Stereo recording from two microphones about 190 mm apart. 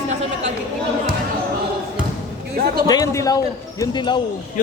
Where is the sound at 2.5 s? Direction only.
55° right (ahead or behind).